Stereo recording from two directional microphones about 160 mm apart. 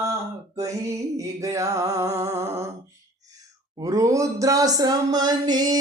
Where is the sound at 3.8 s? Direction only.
20° right (ahead or behind).